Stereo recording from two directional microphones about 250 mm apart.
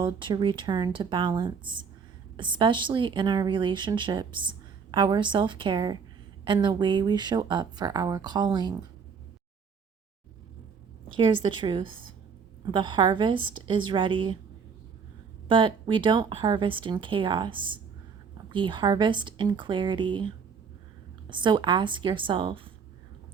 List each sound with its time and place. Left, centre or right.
0.0 s a woman's voice: centre
11.4 s a woman's voice: centre
15.4 s a woman's voice: centre